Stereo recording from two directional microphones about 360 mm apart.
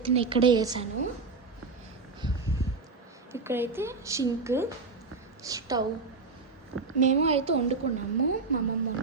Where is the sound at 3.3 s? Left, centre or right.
Centre.